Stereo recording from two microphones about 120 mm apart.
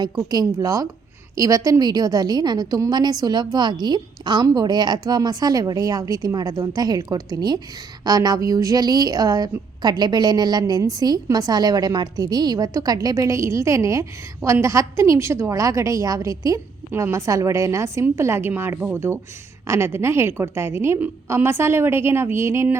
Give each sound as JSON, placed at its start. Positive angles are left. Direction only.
{"t": 0.0, "sound": "a woman's voice", "side_deg": -35}